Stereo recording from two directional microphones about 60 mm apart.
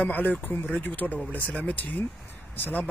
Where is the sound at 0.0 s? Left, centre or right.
Left.